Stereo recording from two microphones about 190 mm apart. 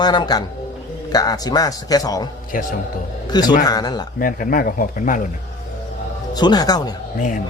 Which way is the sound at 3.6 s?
20° left (ahead or behind).